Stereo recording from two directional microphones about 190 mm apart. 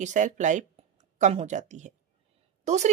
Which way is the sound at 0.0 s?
40° right (ahead or behind).